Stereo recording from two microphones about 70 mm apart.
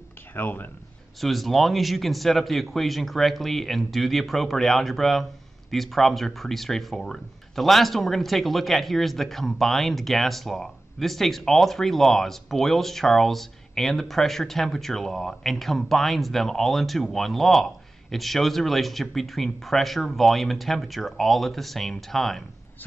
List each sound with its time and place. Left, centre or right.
0.3 s speech: left
1.2 s speech: centre